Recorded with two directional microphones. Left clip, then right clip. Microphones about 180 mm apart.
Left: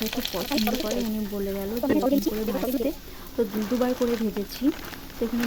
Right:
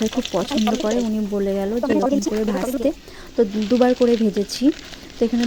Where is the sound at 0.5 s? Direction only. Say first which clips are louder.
Right 3 dB; centre (ahead or behind).